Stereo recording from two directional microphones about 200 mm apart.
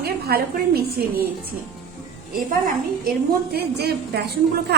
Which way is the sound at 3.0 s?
50° right (ahead or behind).